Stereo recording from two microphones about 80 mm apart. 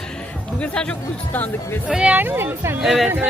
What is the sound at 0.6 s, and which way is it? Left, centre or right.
Speech, centre.